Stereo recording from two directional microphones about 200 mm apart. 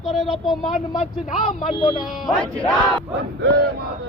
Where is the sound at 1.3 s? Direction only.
35° left (ahead or behind).